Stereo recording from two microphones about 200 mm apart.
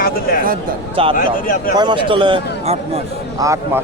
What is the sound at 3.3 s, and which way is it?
Speech, 15° right (ahead or behind).